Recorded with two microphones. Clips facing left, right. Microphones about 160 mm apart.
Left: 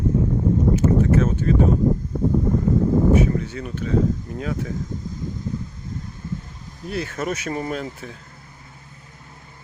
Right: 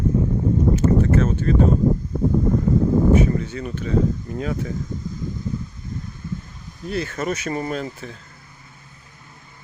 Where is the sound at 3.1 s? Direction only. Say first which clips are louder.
Right 1 dB; 5° left (ahead or behind).